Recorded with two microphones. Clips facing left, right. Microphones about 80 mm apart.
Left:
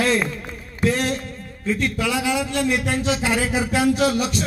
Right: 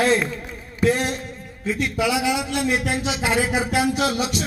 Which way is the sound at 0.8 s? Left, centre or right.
Right.